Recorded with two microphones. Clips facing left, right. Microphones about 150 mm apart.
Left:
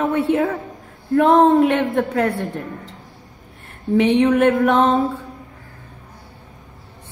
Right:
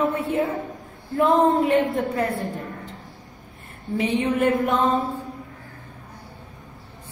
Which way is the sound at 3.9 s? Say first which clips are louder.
Left 8 dB; 75° left (ahead or behind).